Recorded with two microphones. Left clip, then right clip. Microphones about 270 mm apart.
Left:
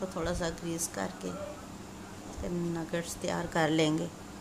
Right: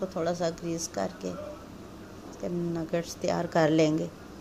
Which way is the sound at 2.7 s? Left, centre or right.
Centre.